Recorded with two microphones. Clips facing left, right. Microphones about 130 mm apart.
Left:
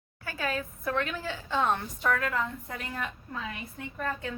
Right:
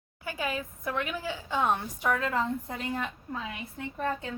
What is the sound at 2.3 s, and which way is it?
A woman's voice, 30° right (ahead or behind).